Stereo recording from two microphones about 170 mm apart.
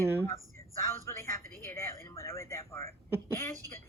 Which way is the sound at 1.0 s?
15° left (ahead or behind).